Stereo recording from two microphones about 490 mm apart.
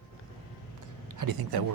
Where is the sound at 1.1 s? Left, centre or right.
Right.